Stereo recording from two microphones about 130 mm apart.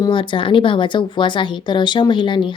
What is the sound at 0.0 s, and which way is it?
Speech, 40° left (ahead or behind).